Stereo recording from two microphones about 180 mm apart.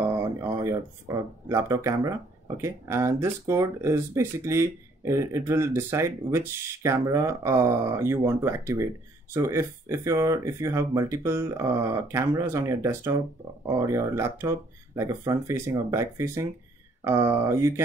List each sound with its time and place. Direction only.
0.7 s speech: 15° right (ahead or behind)